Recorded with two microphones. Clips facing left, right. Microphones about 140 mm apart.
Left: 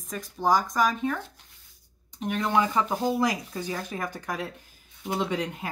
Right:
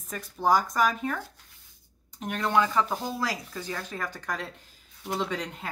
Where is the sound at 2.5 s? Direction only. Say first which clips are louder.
Right 1 dB; 15° left (ahead or behind).